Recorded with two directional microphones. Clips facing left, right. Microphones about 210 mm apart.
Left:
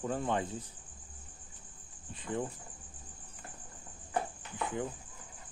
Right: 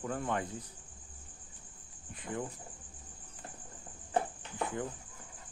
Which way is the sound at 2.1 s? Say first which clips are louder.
Left 3 dB; 25° left (ahead or behind).